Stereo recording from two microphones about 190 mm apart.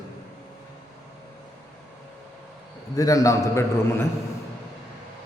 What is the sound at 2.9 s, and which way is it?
A man's voice, 15° left (ahead or behind).